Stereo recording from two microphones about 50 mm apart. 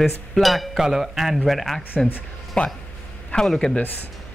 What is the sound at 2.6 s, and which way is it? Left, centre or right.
A man's voice, centre.